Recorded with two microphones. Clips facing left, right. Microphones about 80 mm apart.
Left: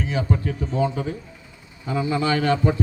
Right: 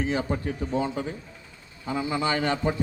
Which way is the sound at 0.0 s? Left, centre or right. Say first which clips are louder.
Left 2 dB; right.